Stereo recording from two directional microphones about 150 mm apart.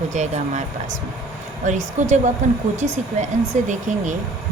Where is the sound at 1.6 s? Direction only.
55° right (ahead or behind).